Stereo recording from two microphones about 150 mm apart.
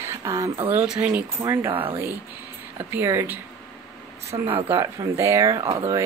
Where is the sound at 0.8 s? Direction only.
10° right (ahead or behind).